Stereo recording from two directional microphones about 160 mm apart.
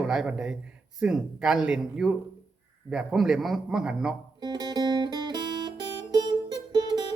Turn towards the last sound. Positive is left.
turn(degrees=-25)  # may be behind; listen again after turning